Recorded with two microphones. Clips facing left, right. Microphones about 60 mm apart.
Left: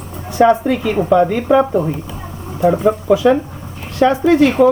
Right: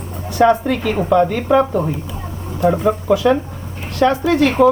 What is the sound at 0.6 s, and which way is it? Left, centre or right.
Speech, centre.